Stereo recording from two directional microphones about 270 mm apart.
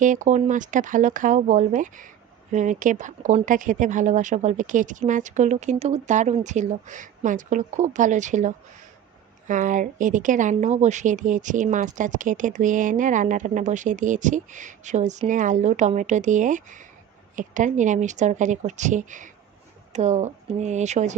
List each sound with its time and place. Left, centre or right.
0.0 s speech: right